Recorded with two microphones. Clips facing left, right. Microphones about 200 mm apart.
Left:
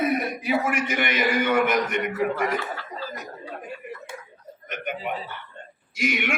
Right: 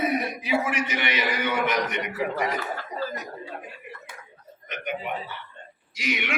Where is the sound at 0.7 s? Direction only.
50° left (ahead or behind).